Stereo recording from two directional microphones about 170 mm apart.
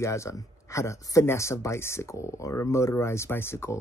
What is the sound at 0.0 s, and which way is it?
Speech, 15° left (ahead or behind).